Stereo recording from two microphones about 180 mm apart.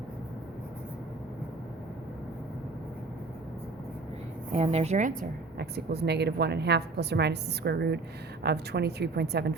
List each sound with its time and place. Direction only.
4.5 s speech: 35° right (ahead or behind)
5.5 s a woman's voice: 65° right (ahead or behind)